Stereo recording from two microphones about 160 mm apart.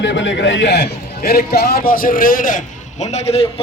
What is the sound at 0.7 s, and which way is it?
A man's voice, 90° left.